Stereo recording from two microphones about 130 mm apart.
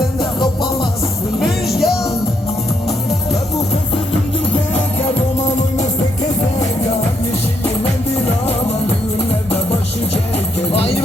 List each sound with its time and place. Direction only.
1.4 s music: centre (ahead or behind)
5.4 s music: 65° left (ahead or behind)
10.7 s music: 50° left (ahead or behind)